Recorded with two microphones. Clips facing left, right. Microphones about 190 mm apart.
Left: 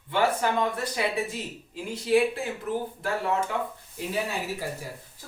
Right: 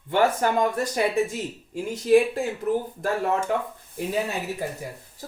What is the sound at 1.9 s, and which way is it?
Speech, 45° right (ahead or behind).